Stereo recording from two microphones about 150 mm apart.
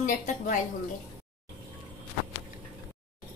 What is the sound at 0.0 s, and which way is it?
Speech, 60° left (ahead or behind).